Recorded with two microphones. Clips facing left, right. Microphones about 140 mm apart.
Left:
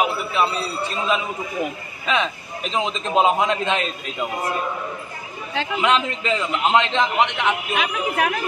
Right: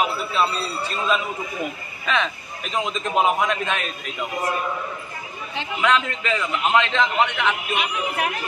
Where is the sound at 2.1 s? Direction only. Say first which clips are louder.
Left 1 dB; 20° left (ahead or behind).